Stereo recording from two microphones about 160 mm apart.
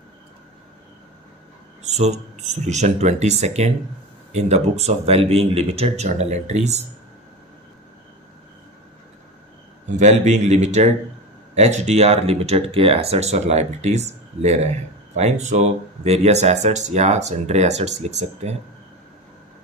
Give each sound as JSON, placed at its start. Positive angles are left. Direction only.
{"t": 1.9, "sound": "speech", "side_deg": -45}
{"t": 9.9, "sound": "speech", "side_deg": -45}